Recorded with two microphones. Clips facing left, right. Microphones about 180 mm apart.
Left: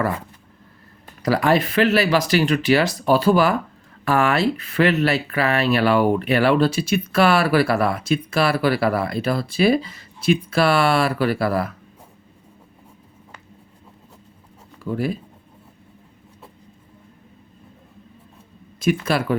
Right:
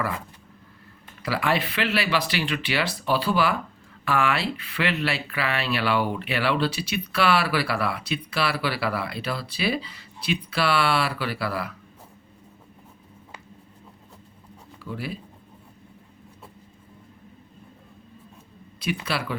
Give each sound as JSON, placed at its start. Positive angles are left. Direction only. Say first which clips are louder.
{"t": 1.2, "sound": "speech", "louder": "left 7 dB", "side_deg": 40}
{"t": 14.8, "sound": "speech", "louder": "left 9 dB", "side_deg": 45}
{"t": 19.0, "sound": "speech", "louder": "left 8 dB", "side_deg": 45}